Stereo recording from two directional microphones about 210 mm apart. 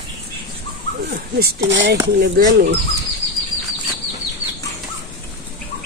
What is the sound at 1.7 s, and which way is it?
Speech, 60° right (ahead or behind).